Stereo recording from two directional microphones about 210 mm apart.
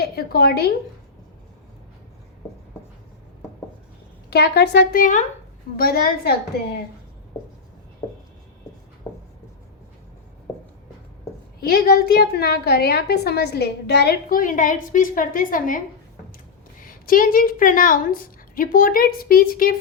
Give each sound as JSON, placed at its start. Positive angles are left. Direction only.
{"t": 0.0, "sound": "a woman's voice", "side_deg": 50}
{"t": 4.3, "sound": "a woman's voice", "side_deg": 50}
{"t": 11.6, "sound": "a woman's voice", "side_deg": 50}
{"t": 16.8, "sound": "a woman's voice", "side_deg": 40}